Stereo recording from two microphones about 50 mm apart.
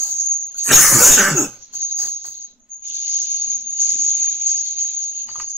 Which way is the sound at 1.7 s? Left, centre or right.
Right.